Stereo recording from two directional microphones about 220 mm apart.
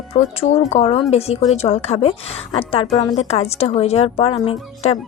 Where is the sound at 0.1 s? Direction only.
30° left (ahead or behind).